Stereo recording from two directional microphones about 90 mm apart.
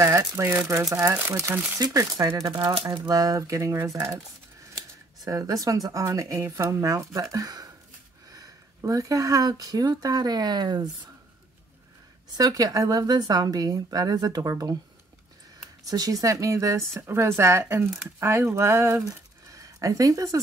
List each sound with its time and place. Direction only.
0.0 s rattle: 35° right (ahead or behind)
0.4 s speech: 25° right (ahead or behind)
1.8 s speech: 35° right (ahead or behind)
2.7 s speech: 65° right (ahead or behind)
3.1 s speech: 40° right (ahead or behind)
12.4 s a woman's voice: 45° right (ahead or behind)
15.9 s speech: 40° right (ahead or behind)
19.0 s a sound: 40° right (ahead or behind)